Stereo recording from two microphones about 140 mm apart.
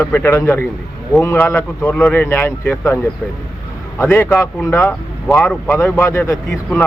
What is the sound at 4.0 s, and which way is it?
Speech, 15° left (ahead or behind).